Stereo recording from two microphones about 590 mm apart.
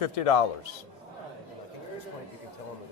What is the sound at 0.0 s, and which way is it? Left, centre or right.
Speech, left.